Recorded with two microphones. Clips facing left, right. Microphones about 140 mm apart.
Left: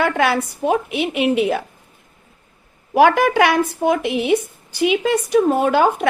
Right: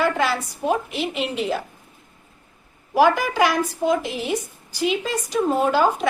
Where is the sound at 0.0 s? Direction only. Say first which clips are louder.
Left 3 dB; 60° left (ahead or behind).